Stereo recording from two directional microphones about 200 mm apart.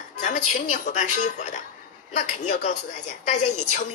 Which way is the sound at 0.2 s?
40° left (ahead or behind).